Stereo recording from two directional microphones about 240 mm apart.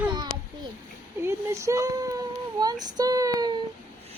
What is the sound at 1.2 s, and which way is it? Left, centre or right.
Speech, centre.